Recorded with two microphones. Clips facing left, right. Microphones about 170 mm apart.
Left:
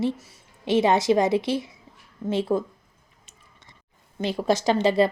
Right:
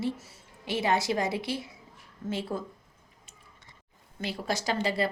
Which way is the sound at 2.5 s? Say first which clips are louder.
Left 13 dB; 70° left (ahead or behind).